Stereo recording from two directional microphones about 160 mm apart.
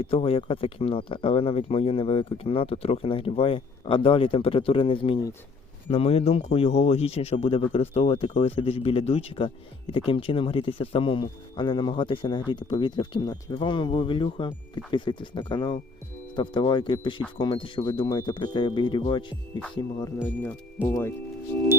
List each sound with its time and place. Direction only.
0.0 s speech: 35° left (ahead or behind)
20.2 s speech: 10° left (ahead or behind)